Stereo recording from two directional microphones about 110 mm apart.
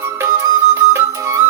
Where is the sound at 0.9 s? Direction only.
25° right (ahead or behind).